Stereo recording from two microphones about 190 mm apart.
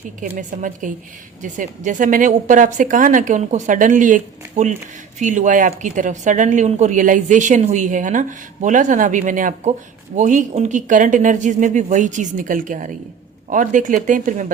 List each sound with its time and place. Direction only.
0.2 s a woman's voice: 45° right (ahead or behind)